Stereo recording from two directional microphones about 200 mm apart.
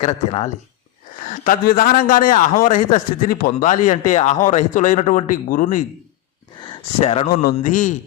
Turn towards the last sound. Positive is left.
turn(degrees=40)  # may be behind; listen again after turning